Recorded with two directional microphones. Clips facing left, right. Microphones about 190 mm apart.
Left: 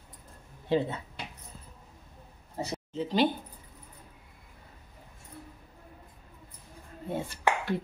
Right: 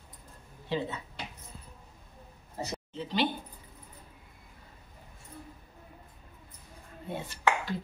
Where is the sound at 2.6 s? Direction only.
35° left (ahead or behind).